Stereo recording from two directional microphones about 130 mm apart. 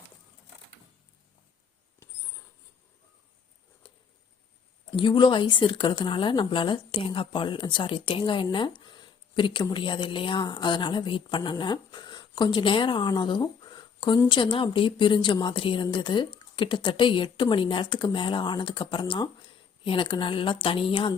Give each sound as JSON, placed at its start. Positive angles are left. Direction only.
{"t": 4.9, "sound": "speech", "side_deg": 40}